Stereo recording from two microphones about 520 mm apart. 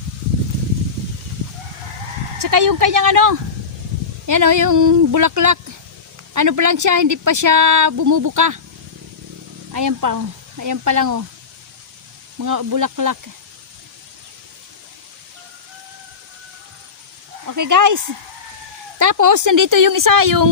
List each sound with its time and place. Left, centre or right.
2.4 s speech: right
9.7 s speech: right
12.4 s speech: right
17.4 s speech: right